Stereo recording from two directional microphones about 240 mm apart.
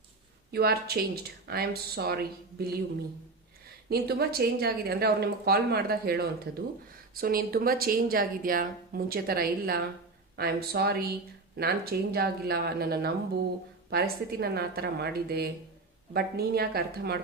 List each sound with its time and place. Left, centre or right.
0.5 s speech: right
3.8 s speech: right